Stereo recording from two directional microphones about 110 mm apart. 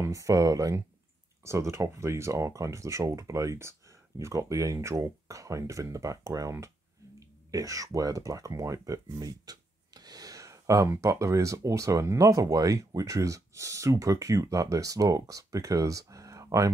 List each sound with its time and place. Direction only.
0.0 s speech: 30° right (ahead or behind)